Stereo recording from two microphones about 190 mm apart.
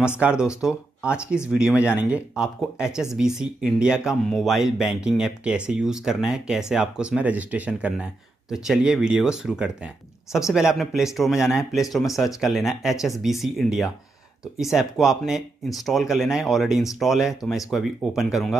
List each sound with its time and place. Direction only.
0.2 s speech: 5° right (ahead or behind)